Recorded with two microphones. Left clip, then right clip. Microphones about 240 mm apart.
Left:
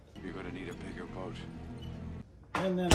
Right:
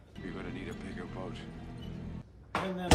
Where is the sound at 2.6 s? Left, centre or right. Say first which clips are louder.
Left 4 dB; left.